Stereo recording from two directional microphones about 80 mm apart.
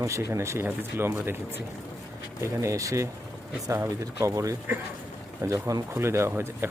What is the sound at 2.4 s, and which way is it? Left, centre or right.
Speech, right.